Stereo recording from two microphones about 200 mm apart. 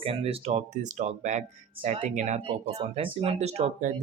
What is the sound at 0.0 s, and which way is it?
Speech, 30° right (ahead or behind).